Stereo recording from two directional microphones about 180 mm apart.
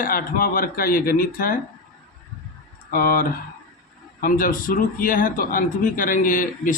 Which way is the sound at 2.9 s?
55° left (ahead or behind).